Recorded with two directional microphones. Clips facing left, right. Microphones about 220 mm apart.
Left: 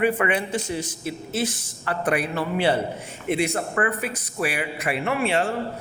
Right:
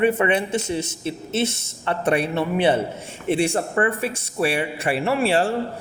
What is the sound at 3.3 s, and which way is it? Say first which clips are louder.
Speech: right 3 dB; 30° right (ahead or behind).